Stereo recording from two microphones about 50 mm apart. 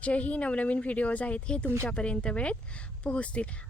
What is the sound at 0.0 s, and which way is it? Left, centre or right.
Speech, left.